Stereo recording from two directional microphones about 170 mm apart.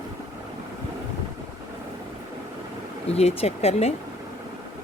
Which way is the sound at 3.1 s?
35° left (ahead or behind).